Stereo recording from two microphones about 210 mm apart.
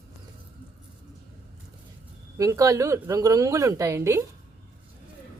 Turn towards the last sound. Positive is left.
turn(degrees=-15)  # may be behind; listen again after turning